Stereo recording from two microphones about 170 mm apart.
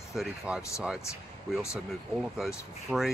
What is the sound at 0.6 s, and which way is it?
Speech, 15° left (ahead or behind).